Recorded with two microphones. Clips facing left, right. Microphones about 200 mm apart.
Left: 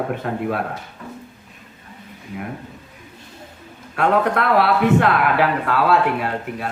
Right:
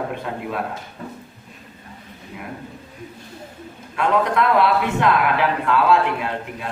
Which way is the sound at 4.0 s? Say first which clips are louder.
Left 1 dB; 55° left (ahead or behind).